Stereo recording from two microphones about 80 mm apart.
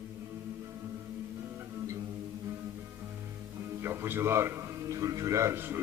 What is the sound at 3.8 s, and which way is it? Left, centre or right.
A man's voice, right.